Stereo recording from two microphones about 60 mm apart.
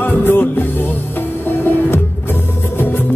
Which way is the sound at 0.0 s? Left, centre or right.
Left.